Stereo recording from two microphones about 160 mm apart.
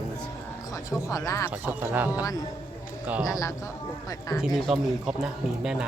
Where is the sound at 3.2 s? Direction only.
20° left (ahead or behind).